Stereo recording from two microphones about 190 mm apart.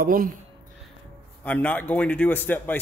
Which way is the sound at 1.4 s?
10° left (ahead or behind).